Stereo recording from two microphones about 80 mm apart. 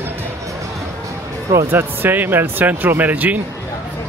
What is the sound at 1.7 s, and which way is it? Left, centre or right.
Speech, right.